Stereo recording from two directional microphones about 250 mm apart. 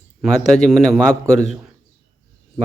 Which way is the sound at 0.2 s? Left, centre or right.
Centre.